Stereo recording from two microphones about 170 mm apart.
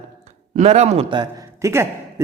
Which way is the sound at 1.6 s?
15° right (ahead or behind).